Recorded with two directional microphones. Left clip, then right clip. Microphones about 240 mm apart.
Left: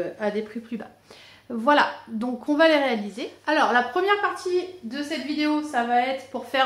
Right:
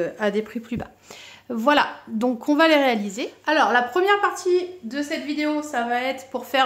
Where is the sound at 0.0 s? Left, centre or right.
Right.